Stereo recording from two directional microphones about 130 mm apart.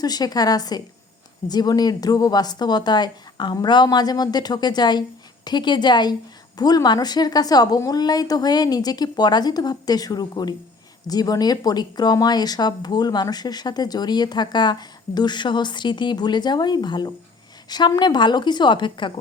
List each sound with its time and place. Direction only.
0.0 s speech: 30° left (ahead or behind)